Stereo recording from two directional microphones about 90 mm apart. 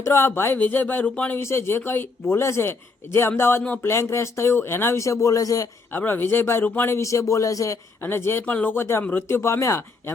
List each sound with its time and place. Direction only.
0.0 s a man's voice: 25° left (ahead or behind)
1.4 s a man's voice: 30° left (ahead or behind)
5.9 s a man's voice: 20° left (ahead or behind); by 7.8 s 35° left (ahead or behind)
8.0 s a man's voice: 25° left (ahead or behind)